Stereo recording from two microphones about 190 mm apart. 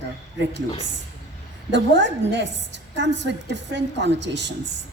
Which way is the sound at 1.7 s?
70° right (ahead or behind).